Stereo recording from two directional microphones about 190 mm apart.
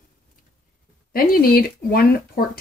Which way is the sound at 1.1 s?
50° left (ahead or behind).